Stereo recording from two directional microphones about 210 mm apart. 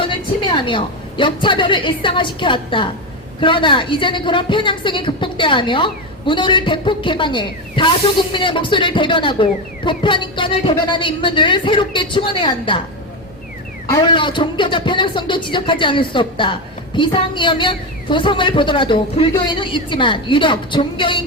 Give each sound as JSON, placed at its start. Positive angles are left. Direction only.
{"t": 0.5, "sound": "a woman's voice", "side_deg": 25}
{"t": 13.9, "sound": "a woman's voice", "side_deg": 20}